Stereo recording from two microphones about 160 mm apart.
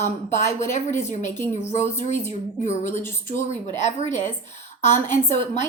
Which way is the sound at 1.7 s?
50° left (ahead or behind).